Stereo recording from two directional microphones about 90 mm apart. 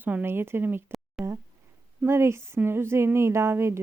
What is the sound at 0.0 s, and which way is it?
Speech, 20° right (ahead or behind).